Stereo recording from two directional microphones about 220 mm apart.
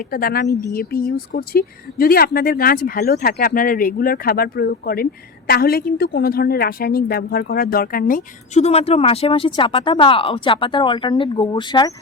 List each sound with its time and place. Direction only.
0.1 s a woman's voice: 40° left (ahead or behind); by 11.9 s 20° left (ahead or behind)